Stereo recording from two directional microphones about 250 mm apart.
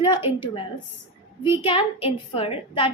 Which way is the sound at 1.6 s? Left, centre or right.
Left.